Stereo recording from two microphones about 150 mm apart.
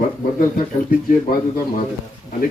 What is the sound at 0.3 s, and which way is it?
Speech, 70° left (ahead or behind).